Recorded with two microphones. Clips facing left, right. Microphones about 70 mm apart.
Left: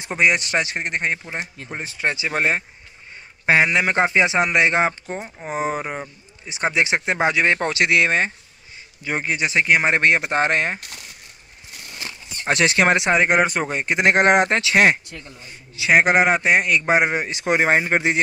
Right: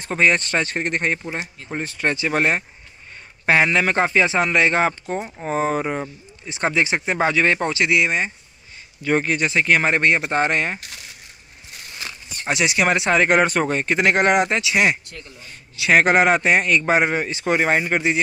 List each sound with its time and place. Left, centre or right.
0.0 s speech: centre
5.0 s speech: centre
5.5 s speech: centre
7.6 s speech: left
9.0 s speech: centre; by 10.8 s left
12.4 s speech: left
12.9 s speech: centre
14.0 s speech: left
14.5 s speech: left
15.8 s speech: centre
17.5 s speech: left